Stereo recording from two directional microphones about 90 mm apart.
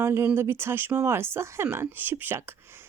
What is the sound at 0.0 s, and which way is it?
Speech, 25° right (ahead or behind).